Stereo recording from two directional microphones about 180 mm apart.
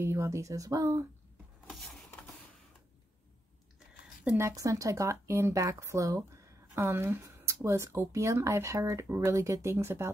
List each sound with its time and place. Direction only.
0.0 s speech: 15° right (ahead or behind)
1.7 s a sound: centre (ahead or behind)
4.2 s speech: 10° right (ahead or behind)